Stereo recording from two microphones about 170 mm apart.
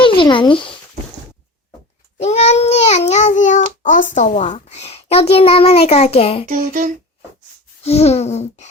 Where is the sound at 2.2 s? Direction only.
40° left (ahead or behind).